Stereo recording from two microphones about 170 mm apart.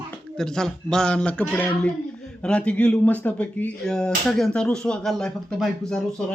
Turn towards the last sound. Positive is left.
turn(degrees=5)  # may be behind; listen again after turning